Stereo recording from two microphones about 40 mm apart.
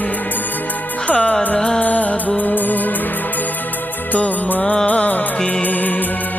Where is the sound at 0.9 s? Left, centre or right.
Left.